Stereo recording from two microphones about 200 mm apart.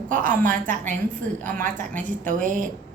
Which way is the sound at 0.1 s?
40° right (ahead or behind).